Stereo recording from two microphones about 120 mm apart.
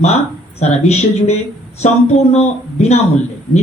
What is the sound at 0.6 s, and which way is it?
A man's voice, 65° left (ahead or behind).